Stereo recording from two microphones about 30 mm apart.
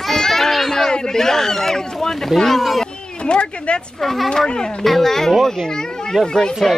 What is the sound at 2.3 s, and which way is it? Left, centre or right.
Speech, centre.